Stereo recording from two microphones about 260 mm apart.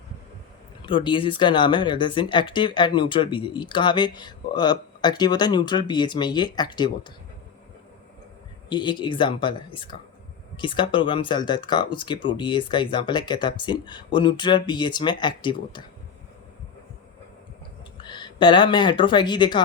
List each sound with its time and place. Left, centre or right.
0.8 s speech: centre
8.7 s speech: centre
18.0 s speech: centre